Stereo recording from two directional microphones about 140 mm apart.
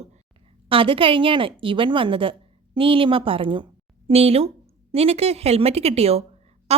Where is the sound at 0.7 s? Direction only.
40° right (ahead or behind).